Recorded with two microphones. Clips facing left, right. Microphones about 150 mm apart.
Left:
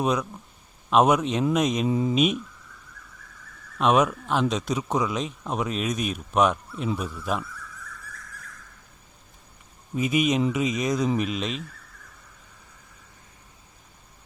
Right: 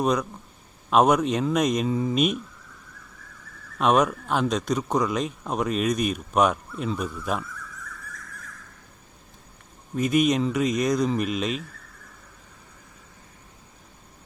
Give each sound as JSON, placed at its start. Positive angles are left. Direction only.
{"t": 0.0, "sound": "speech", "side_deg": 0}
{"t": 1.9, "sound": "speech", "side_deg": 20}
{"t": 2.1, "sound": "speech", "side_deg": 0}
{"t": 3.8, "sound": "speech", "side_deg": 0}
{"t": 9.9, "sound": "speech", "side_deg": 5}